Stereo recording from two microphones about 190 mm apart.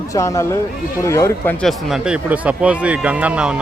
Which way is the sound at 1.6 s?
Centre (ahead or behind).